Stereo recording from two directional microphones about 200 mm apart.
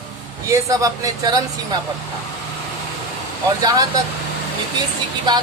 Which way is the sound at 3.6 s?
20° right (ahead or behind).